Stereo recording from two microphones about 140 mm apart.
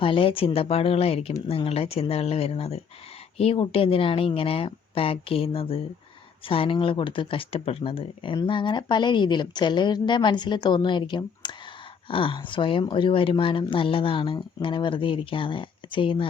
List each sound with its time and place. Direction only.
0.0 s speech: 40° left (ahead or behind)